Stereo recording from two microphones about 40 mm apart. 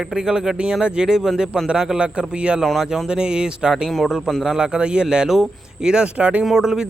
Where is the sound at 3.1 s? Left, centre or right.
Right.